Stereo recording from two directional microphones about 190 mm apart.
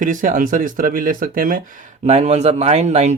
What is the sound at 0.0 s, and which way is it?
Speech, 45° right (ahead or behind).